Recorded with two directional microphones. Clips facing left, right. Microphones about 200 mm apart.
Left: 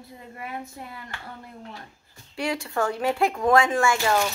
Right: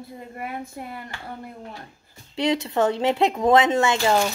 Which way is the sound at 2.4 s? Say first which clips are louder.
Right 5 dB; 20° right (ahead or behind).